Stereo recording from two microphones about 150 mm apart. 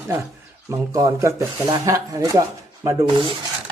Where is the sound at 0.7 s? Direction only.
20° right (ahead or behind).